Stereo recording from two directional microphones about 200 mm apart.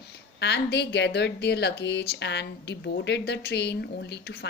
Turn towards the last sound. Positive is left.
turn(degrees=55)  # may be behind; listen again after turning